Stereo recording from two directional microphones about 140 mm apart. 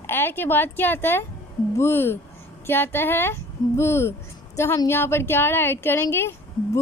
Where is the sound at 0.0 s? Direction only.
15° left (ahead or behind).